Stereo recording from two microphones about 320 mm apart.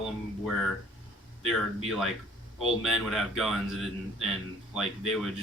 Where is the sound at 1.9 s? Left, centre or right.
Centre.